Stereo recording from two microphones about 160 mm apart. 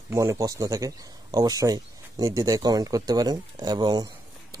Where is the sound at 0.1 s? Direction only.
20° right (ahead or behind).